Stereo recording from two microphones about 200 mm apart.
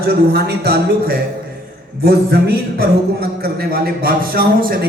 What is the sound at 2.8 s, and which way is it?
A man's voice, 50° right (ahead or behind).